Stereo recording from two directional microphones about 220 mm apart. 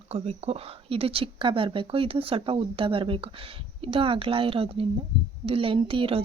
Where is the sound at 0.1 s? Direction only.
25° right (ahead or behind).